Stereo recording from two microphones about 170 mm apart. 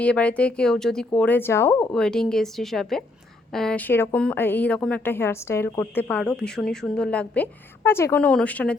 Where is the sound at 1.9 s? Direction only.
5° left (ahead or behind).